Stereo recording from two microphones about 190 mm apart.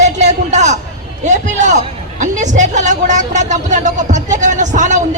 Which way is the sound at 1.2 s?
40° right (ahead or behind).